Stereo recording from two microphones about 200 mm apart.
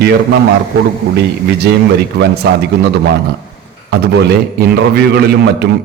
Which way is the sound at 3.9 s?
55° right (ahead or behind).